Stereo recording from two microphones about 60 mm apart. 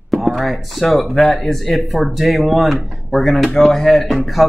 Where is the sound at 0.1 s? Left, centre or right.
Centre.